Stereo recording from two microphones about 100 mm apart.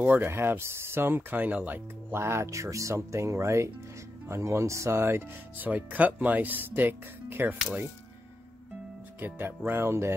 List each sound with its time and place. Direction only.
0.0 s speech: 20° right (ahead or behind)
9.2 s speech: 20° right (ahead or behind)